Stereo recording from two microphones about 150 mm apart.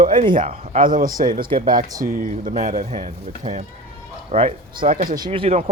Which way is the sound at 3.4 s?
45° right (ahead or behind).